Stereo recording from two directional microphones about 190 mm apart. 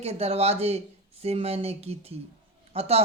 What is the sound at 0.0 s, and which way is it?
Speech, 35° right (ahead or behind).